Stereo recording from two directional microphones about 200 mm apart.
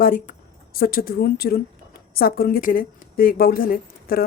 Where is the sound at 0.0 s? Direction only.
45° left (ahead or behind).